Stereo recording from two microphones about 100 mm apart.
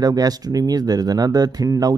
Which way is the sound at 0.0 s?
40° right (ahead or behind).